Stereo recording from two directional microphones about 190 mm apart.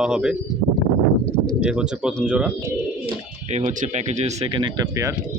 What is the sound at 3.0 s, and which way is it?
Speech, 40° right (ahead or behind).